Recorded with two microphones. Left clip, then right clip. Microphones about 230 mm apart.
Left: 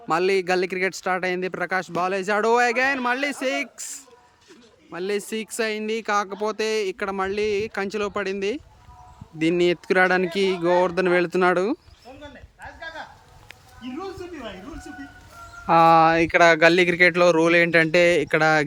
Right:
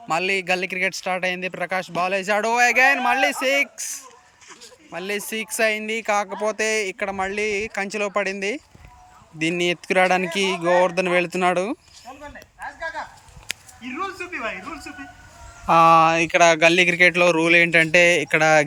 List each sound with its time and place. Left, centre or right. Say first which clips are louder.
0.1 s speech: left 1 dB; centre
15.6 s speech: right 1 dB; centre